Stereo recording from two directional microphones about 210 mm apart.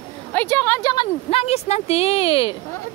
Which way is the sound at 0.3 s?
10° left (ahead or behind).